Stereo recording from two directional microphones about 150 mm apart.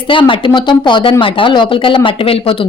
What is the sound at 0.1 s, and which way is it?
Speech, 35° left (ahead or behind).